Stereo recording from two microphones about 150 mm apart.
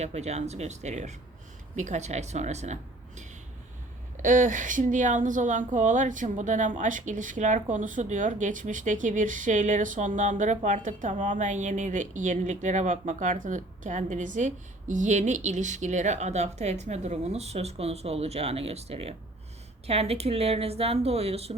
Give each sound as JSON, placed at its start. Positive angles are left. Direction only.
{"t": 0.0, "sound": "speech", "side_deg": -45}
{"t": 4.2, "sound": "a woman's voice", "side_deg": -60}